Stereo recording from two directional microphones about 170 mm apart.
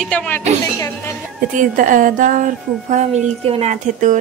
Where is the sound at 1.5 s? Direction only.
50° right (ahead or behind).